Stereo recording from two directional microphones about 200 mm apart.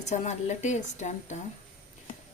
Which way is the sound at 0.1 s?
35° left (ahead or behind).